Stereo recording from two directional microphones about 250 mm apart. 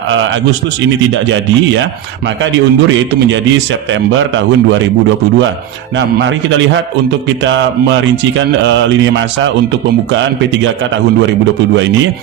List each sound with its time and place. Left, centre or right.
1.1 s speech: right
4.2 s speech: right
6.1 s speech: right